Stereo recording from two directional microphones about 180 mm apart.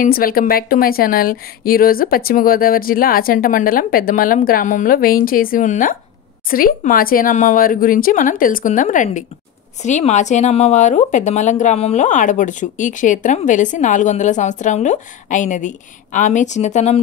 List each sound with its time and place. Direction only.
0.0 s speech: 55° left (ahead or behind)